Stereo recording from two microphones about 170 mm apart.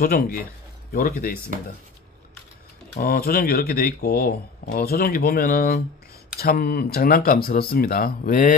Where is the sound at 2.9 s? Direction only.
60° left (ahead or behind).